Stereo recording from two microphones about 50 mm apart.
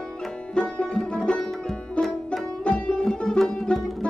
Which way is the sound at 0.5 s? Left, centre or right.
Centre.